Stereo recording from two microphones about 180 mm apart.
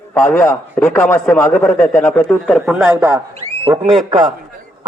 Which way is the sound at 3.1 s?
25° right (ahead or behind).